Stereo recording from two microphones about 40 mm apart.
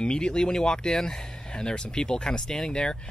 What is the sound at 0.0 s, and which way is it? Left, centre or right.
Speech, left.